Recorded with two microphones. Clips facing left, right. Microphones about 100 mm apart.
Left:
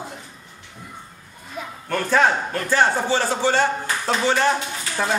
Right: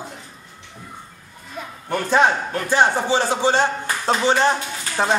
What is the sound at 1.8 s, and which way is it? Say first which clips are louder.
A man's voice: right 1 dB; 20° right (ahead or behind).